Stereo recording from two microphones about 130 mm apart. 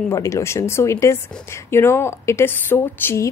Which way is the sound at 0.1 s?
20° left (ahead or behind).